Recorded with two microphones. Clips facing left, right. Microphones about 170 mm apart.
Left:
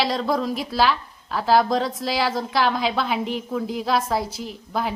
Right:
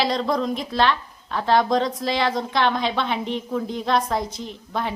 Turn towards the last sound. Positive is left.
turn(degrees=5)  # may be behind; listen again after turning